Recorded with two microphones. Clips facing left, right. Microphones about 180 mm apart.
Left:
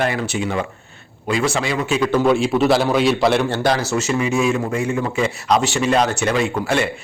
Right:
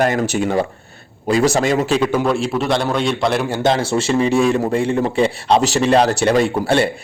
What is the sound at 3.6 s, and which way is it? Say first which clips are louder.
A man's voice: right 2 dB; 25° right (ahead or behind).